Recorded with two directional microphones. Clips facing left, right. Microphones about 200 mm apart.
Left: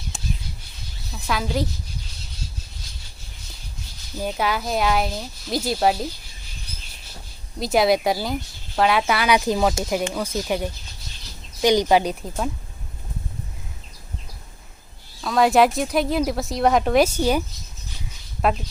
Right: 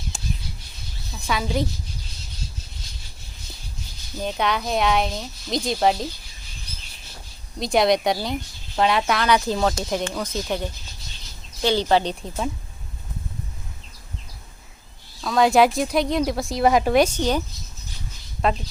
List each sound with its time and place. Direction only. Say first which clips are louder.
0.1 s a sound: left 1 dB; centre (ahead or behind)
1.1 s speech: even; centre (ahead or behind)
4.2 s speech: even; 5° left (ahead or behind)
7.6 s speech: even; 5° left (ahead or behind)
15.2 s speech: even; centre (ahead or behind)
18.4 s speech: left 1 dB; 5° left (ahead or behind)